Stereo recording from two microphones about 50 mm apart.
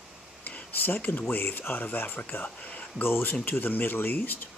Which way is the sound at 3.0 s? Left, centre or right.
Left.